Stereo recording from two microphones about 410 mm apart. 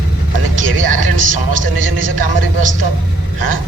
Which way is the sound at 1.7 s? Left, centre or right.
Right.